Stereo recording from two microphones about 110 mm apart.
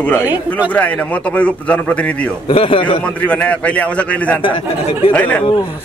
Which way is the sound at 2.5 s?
55° left (ahead or behind).